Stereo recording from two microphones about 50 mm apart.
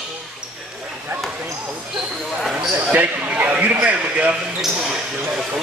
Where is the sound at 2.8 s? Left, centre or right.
Right.